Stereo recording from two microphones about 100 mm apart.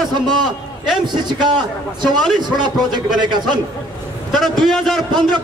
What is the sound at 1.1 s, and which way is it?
A man's voice, 45° right (ahead or behind).